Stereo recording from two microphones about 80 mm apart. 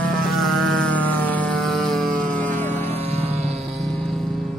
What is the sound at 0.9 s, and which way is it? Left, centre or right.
Music, left.